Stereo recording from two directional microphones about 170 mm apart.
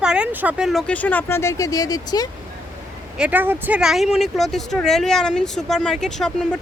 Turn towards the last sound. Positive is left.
turn(degrees=5)  # may be behind; listen again after turning